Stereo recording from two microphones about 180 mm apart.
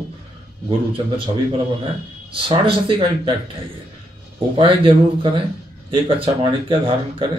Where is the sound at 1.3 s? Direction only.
30° right (ahead or behind).